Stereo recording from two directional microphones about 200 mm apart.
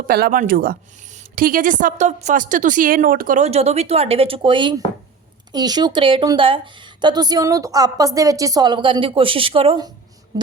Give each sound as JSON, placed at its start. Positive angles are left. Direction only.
{"t": 0.1, "sound": "a woman's voice", "side_deg": -45}